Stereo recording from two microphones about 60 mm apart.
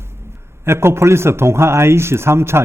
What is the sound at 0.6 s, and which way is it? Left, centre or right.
A man's voice, right.